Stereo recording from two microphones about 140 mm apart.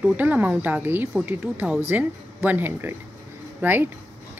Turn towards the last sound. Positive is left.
turn(degrees=-15)  # may be behind; listen again after turning